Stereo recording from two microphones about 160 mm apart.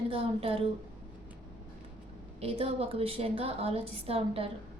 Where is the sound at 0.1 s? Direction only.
35° right (ahead or behind).